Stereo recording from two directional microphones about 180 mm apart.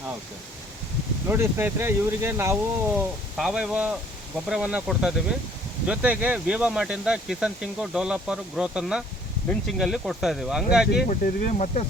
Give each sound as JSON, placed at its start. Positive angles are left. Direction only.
{"t": 1.3, "sound": "speech", "side_deg": -10}
{"t": 3.3, "sound": "speech", "side_deg": -5}
{"t": 11.1, "sound": "speech", "side_deg": 50}